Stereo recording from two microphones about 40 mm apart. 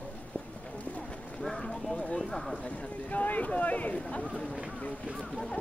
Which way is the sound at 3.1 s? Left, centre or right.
Left.